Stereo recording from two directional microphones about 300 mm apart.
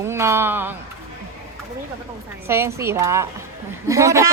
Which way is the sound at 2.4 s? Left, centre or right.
Centre.